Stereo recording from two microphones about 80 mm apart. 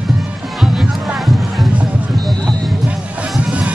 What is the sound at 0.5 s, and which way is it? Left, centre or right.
Music, centre.